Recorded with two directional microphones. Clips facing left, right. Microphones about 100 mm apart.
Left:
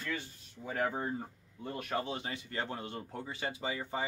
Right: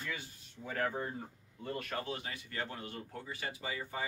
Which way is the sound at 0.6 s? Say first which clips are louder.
Left 2 dB; 15° left (ahead or behind).